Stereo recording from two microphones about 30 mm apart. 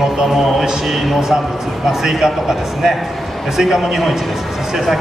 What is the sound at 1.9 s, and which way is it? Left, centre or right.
A man's voice, centre.